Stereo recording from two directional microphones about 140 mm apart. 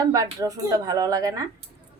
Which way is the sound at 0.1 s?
25° right (ahead or behind).